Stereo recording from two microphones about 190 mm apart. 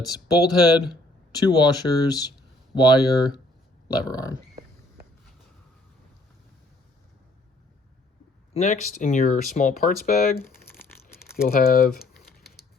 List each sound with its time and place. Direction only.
0.0 s speech: 20° left (ahead or behind)
8.5 s speech: 40° left (ahead or behind)
10.8 s a sound: 10° left (ahead or behind)
11.4 s speech: 50° left (ahead or behind)